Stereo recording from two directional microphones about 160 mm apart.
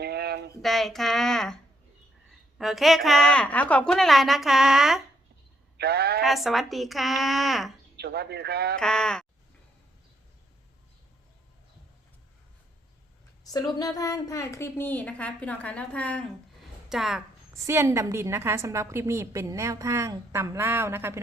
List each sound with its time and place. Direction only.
0.0 s a sound: 90° right
0.6 s a woman's voice: centre (ahead or behind)
2.6 s a woman's voice: centre (ahead or behind)
5.7 s speech: 85° right
6.2 s a woman's voice: centre (ahead or behind)
7.9 s a man's voice: 90° right
8.7 s a woman's voice: 5° left (ahead or behind)
13.4 s a woman's voice: 25° left (ahead or behind); by 17.2 s 5° right (ahead or behind)
17.5 s a woman's voice: 15° right (ahead or behind)